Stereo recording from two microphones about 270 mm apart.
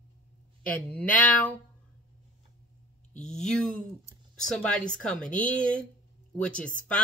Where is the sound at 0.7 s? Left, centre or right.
Centre.